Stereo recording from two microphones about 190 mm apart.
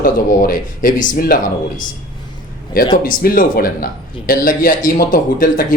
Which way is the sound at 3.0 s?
50° left (ahead or behind).